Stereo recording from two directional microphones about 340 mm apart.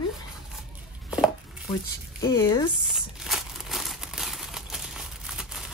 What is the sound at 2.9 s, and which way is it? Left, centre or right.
Crumpling, centre.